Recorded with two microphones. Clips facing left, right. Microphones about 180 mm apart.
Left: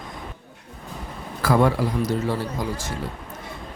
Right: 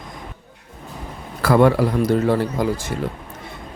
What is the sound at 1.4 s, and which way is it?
Speech, 65° right (ahead or behind).